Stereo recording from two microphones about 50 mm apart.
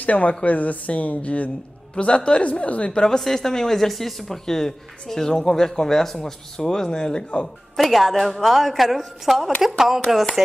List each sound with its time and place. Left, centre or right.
0.0 s a woman's voice: left
3.0 s speech: centre
7.7 s a woman's voice: centre